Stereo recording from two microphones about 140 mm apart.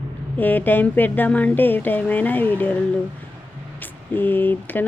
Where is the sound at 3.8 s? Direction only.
15° left (ahead or behind).